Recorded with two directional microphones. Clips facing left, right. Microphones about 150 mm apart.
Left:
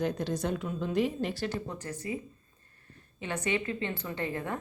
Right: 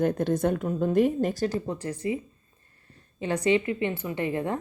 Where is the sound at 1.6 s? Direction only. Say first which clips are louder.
Right 7 dB; 30° right (ahead or behind).